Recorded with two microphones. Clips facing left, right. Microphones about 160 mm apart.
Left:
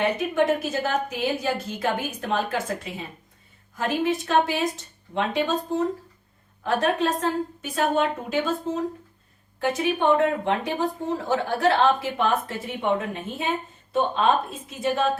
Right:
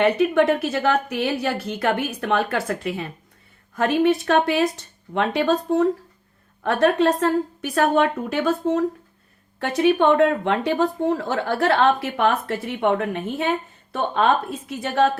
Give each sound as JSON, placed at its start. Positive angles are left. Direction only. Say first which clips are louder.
{"t": 0.0, "sound": "speech", "louder": "right 5 dB", "side_deg": -65}